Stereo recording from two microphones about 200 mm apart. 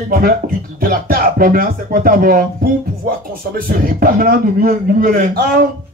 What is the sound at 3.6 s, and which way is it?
A man's voice, 45° right (ahead or behind).